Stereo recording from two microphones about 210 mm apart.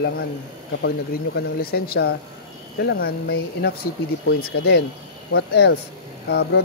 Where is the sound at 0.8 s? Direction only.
50° left (ahead or behind).